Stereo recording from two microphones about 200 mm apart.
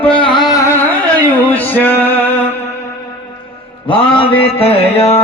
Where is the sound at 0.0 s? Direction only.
25° left (ahead or behind).